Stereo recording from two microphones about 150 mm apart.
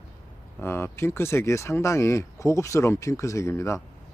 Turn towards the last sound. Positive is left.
turn(degrees=20)  # may be behind; listen again after turning